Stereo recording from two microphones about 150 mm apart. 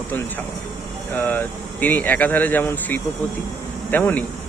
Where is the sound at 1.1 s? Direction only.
10° left (ahead or behind).